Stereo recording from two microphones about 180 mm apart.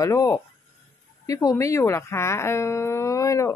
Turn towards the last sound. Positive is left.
turn(degrees=15)  # may be behind; listen again after turning